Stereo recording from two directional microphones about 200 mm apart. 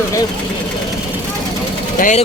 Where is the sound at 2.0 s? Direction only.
40° left (ahead or behind).